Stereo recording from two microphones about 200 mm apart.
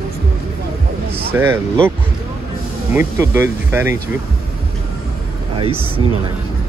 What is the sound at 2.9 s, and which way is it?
Speech, 15° right (ahead or behind).